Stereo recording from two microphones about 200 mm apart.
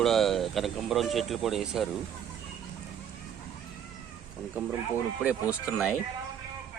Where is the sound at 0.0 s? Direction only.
Centre (ahead or behind).